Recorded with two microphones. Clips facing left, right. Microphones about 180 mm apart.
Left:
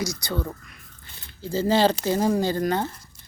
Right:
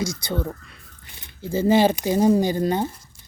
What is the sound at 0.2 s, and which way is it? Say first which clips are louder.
Speech: right 2 dB; 25° right (ahead or behind).